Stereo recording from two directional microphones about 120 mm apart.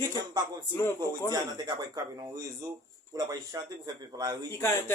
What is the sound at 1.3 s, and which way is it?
Speech, 35° right (ahead or behind).